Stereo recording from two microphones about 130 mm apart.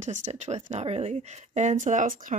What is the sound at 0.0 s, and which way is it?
Speech, 65° right (ahead or behind).